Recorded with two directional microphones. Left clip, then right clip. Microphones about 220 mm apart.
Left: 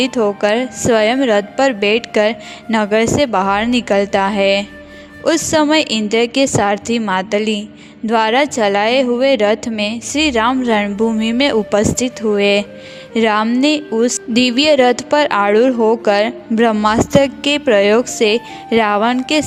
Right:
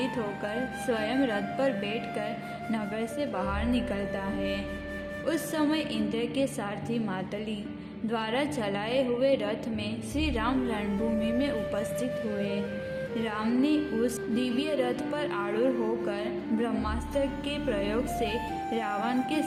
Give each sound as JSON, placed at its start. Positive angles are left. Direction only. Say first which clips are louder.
{"t": 0.0, "sound": "speech", "louder": "left 17 dB", "side_deg": 45}